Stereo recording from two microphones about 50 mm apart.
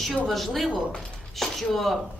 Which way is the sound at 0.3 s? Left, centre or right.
Centre.